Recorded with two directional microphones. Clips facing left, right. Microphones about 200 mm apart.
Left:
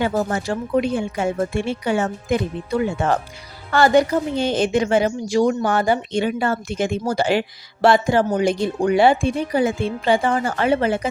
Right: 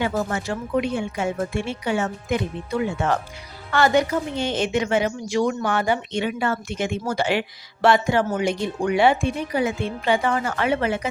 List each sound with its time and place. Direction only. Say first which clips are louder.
0.2 s a woman's voice: left 3 dB; 35° left (ahead or behind)
3.7 s a woman's voice: left 4 dB; 35° left (ahead or behind)